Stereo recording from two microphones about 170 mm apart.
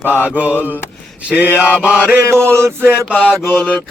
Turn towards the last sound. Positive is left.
turn(degrees=5)  # may be behind; listen again after turning